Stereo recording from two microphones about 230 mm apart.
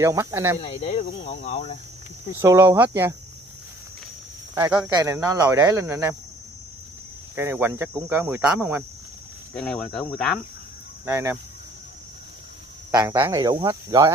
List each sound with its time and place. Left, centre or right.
0.0 s speech: centre
0.6 s speech: left
2.4 s speech: centre
4.6 s speech: centre
7.3 s speech: centre
11.1 s speech: centre
12.9 s speech: centre